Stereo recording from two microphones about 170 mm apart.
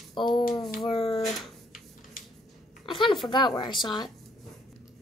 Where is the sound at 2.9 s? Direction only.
30° left (ahead or behind).